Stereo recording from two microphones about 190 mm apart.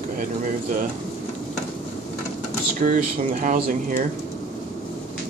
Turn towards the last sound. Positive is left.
turn(degrees=-45)  # may be behind; listen again after turning